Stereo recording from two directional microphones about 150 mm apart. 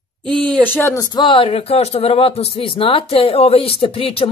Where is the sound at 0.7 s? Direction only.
20° left (ahead or behind).